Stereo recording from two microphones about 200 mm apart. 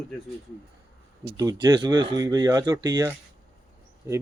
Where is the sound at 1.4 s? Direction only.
20° right (ahead or behind).